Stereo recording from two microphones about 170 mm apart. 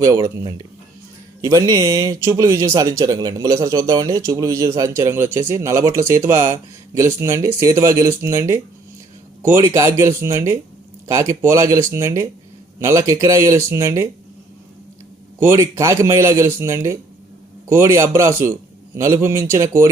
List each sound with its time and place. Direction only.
0.0 s speech: 20° right (ahead or behind)
15.4 s speech: 15° right (ahead or behind)